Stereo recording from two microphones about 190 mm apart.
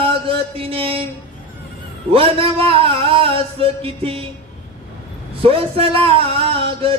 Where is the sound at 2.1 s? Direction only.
30° right (ahead or behind).